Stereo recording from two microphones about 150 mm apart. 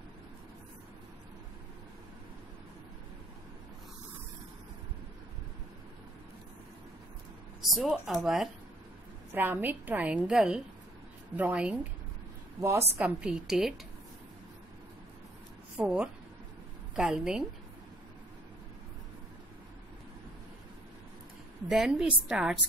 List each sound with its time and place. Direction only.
7.6 s a woman's voice: 5° right (ahead or behind)
9.3 s a woman's voice: 15° right (ahead or behind)
12.5 s a woman's voice: 20° right (ahead or behind); by 13.7 s centre (ahead or behind)
15.8 s a woman's voice: 5° right (ahead or behind)
21.6 s a woman's voice: 5° right (ahead or behind)